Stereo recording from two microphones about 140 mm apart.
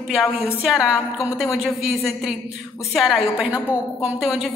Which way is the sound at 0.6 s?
5° right (ahead or behind).